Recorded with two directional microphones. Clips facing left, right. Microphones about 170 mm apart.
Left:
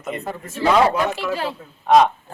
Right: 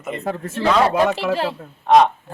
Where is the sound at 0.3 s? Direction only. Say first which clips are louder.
Right 5 dB; 60° right (ahead or behind).